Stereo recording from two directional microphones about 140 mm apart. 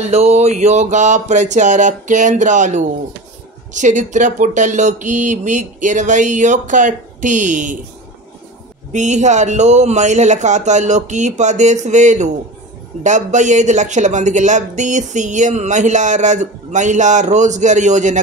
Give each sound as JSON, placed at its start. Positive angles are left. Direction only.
{"t": 0.1, "sound": "speech", "side_deg": -50}
{"t": 8.9, "sound": "speech", "side_deg": -60}